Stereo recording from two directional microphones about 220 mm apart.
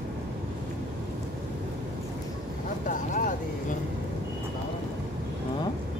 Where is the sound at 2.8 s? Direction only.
35° left (ahead or behind).